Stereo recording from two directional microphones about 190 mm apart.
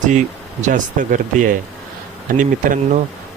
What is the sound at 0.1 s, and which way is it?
Speech, 40° right (ahead or behind).